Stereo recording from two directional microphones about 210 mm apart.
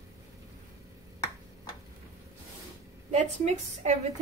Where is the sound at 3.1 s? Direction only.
35° right (ahead or behind).